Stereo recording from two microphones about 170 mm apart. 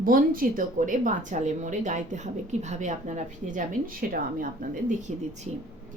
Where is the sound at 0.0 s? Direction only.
55° right (ahead or behind).